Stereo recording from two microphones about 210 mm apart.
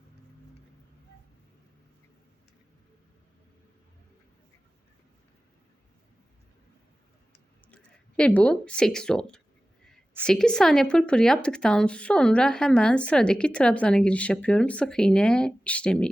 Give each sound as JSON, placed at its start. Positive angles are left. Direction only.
{"t": 7.7, "sound": "speech", "side_deg": 5}